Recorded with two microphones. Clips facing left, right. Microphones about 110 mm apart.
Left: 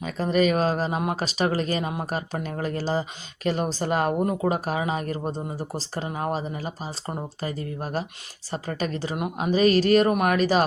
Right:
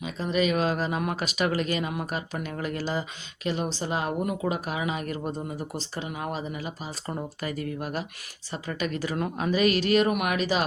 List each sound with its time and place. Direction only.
0.0 s speech: 45° left (ahead or behind)
3.4 s a woman's voice: 45° left (ahead or behind)
4.2 s speech: 35° left (ahead or behind)
7.1 s speech: 25° left (ahead or behind)
9.1 s speech: 15° left (ahead or behind)
9.5 s speech: 35° left (ahead or behind)